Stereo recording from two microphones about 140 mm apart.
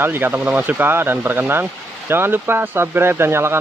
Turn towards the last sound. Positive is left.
turn(degrees=-20)  # may be behind; listen again after turning